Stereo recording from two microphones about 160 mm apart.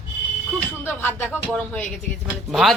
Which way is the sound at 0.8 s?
15° left (ahead or behind).